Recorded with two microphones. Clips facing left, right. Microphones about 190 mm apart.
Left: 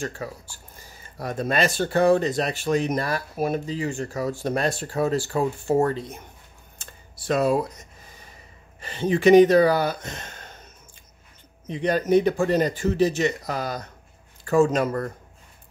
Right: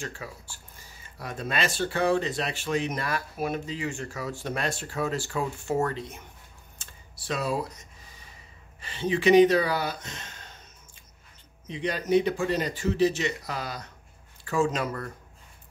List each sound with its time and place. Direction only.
0.2 s speech: 40° left (ahead or behind)
6.8 s computer keyboard: 50° left (ahead or behind)
8.8 s speech: 45° left (ahead or behind)
11.6 s speech: 50° left (ahead or behind)